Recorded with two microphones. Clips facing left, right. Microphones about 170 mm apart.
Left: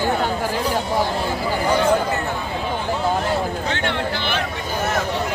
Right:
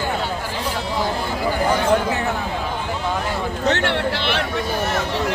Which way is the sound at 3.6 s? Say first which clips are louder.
Right 4 dB; 70° right (ahead or behind).